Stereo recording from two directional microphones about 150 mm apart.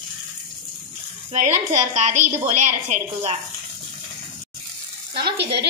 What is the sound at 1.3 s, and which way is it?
A woman's voice, 50° right (ahead or behind).